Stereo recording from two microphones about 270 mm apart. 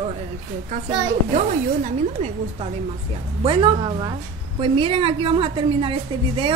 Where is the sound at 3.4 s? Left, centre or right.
Centre.